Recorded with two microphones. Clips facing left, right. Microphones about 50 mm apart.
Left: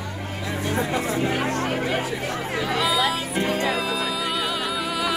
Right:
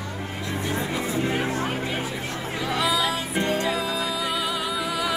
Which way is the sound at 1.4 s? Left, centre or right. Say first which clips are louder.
Left 2 dB; left.